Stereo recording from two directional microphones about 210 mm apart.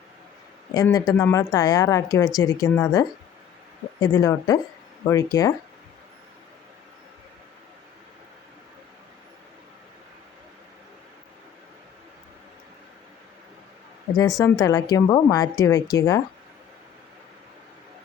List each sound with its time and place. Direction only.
0.7 s a woman's voice: 20° left (ahead or behind)
14.2 s a woman's voice: 15° left (ahead or behind)